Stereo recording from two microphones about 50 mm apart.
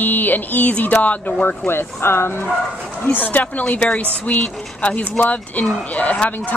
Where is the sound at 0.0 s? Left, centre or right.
Left.